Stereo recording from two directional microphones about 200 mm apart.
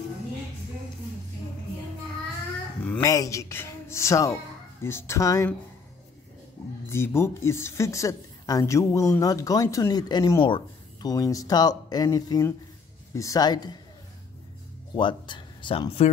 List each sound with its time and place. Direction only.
2.8 s a woman's voice: 10° left (ahead or behind)
6.9 s a woman's voice: 10° left (ahead or behind)
15.0 s speech: 25° left (ahead or behind)